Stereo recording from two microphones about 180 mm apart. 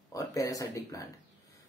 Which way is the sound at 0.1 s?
20° left (ahead or behind).